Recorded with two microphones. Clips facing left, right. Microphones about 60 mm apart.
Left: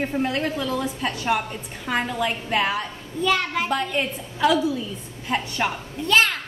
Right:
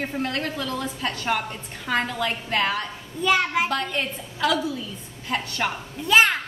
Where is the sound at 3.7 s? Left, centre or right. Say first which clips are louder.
Left 2 dB; centre.